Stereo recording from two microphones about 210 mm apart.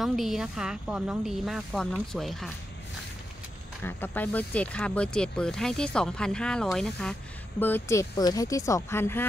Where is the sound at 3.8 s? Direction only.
10° left (ahead or behind).